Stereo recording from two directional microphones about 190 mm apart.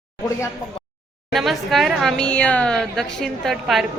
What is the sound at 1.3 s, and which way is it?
A woman's voice, centre (ahead or behind).